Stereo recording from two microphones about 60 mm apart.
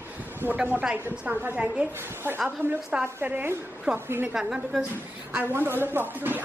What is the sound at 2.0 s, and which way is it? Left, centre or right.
A woman's voice, right.